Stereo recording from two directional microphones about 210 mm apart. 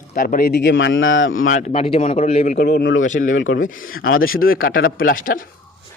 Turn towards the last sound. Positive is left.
turn(degrees=40)  # may be behind; listen again after turning